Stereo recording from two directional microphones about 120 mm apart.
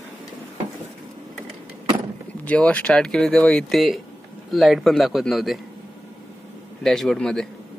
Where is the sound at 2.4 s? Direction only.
10° left (ahead or behind).